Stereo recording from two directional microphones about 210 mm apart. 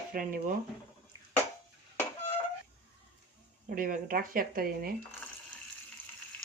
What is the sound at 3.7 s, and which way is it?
Speech, 40° right (ahead or behind).